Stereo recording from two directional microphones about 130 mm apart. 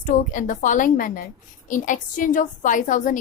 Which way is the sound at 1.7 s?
80° left.